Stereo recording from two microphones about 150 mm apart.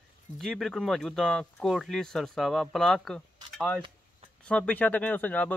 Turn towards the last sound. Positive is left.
turn(degrees=10)  # may be behind; listen again after turning